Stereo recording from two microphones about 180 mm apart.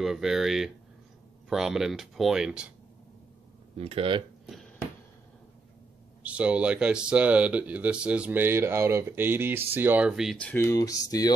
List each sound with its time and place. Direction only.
0.0 s speech: centre (ahead or behind)
3.7 s speech: 30° right (ahead or behind)
6.2 s speech: 5° right (ahead or behind); by 11.3 s 20° left (ahead or behind)